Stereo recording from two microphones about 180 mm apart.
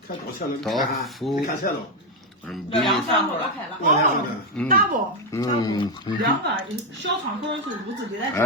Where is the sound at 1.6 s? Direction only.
55° left (ahead or behind).